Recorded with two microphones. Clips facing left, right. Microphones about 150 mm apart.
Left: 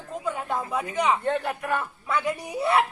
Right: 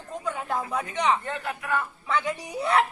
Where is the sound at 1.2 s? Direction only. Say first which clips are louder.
Left 6 dB; 30° left (ahead or behind).